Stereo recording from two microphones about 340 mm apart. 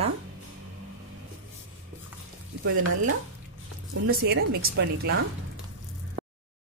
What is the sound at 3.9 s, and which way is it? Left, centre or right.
Speech, right.